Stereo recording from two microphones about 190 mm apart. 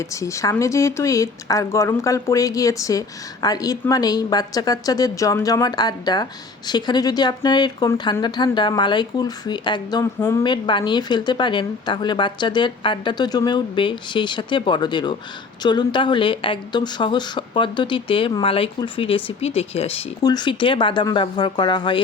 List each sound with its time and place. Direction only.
0.0 s a woman's voice: 15° left (ahead or behind)